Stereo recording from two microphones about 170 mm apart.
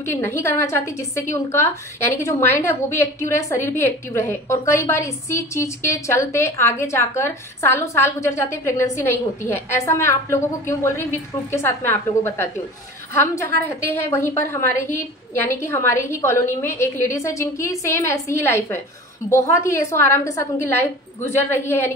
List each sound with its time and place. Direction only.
0.0 s a woman's voice: 15° left (ahead or behind)
13.7 s a woman's voice: 70° right (ahead or behind)
14.1 s a woman's voice: 15° left (ahead or behind)